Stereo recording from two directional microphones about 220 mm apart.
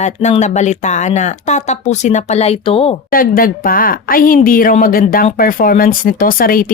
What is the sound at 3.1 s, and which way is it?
Speech, 40° left (ahead or behind).